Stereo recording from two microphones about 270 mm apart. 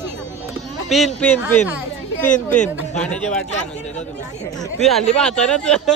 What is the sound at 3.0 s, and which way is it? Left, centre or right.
Speech, centre.